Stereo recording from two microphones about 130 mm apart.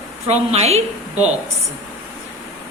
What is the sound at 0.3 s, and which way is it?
Speech, 55° right (ahead or behind).